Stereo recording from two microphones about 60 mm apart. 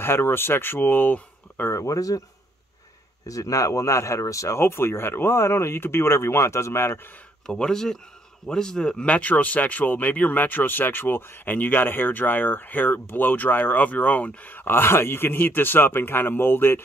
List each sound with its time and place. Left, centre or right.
0.0 s speech: left
1.7 s speech: left
3.3 s speech: left
4.6 s speech: left
7.4 s speech: centre
9.0 s speech: left